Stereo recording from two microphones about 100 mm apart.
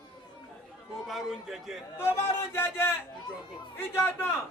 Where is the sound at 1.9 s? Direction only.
25° left (ahead or behind).